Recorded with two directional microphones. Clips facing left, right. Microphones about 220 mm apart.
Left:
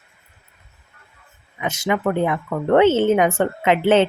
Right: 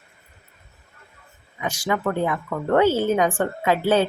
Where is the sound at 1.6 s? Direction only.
25° left (ahead or behind).